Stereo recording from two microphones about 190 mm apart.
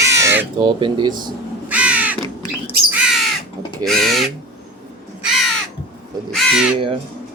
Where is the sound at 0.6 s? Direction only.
25° right (ahead or behind).